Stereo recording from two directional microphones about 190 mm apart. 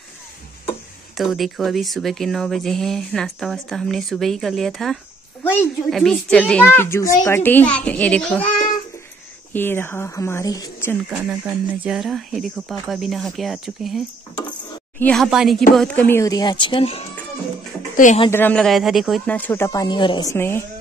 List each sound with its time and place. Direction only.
1.1 s speech: centre (ahead or behind)
9.5 s speech: 10° left (ahead or behind)
11.1 s speech: 5° right (ahead or behind); by 17.1 s 30° left (ahead or behind)
17.9 s speech: 40° left (ahead or behind)
18.3 s speech: 10° left (ahead or behind); by 20.2 s 25° left (ahead or behind)
20.3 s speech: 10° left (ahead or behind)